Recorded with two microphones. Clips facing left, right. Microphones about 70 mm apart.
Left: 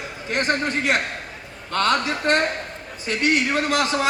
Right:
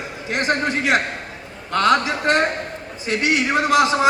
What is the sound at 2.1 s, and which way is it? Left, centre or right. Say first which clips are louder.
A man's voice: right 2 dB; left.